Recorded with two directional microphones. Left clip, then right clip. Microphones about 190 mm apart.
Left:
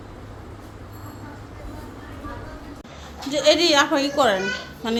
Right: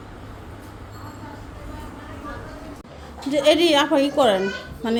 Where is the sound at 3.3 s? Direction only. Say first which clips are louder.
Even; 30° right (ahead or behind).